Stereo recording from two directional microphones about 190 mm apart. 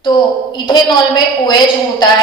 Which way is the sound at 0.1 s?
25° left (ahead or behind).